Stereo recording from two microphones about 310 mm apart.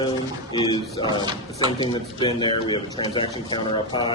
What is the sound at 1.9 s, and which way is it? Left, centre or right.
Speech, centre.